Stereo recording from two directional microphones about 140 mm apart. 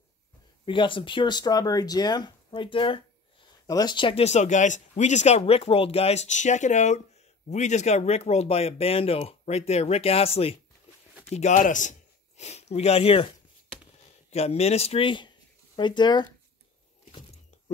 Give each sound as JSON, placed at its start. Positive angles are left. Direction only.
{"t": 0.7, "sound": "speech", "side_deg": 35}
{"t": 4.2, "sound": "speech", "side_deg": 55}
{"t": 14.3, "sound": "speech", "side_deg": 50}